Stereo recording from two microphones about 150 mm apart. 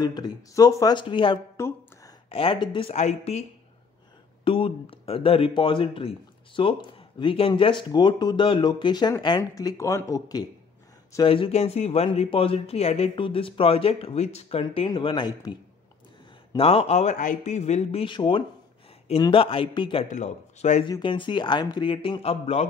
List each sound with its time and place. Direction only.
0.0 s speech: 25° left (ahead or behind)
0.9 s speech: 35° left (ahead or behind)
2.9 s speech: 50° left (ahead or behind)
4.5 s speech: 35° left (ahead or behind)
11.2 s speech: 35° left (ahead or behind)
16.5 s speech: 40° left (ahead or behind)
18.0 s speech: 35° left (ahead or behind)
20.1 s speech: 50° left (ahead or behind)
20.8 s speech: 30° left (ahead or behind)